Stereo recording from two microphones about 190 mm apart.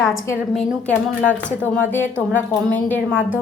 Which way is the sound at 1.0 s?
5° left (ahead or behind).